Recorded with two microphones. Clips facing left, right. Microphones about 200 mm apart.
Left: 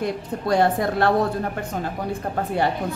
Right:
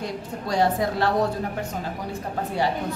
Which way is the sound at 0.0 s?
55° left (ahead or behind).